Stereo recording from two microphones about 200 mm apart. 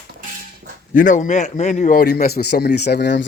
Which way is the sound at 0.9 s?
40° left (ahead or behind).